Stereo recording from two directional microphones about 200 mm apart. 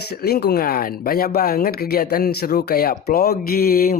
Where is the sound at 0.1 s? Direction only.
50° left (ahead or behind).